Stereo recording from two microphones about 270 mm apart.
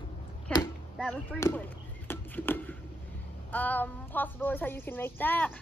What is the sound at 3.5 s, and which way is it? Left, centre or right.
Speech, centre.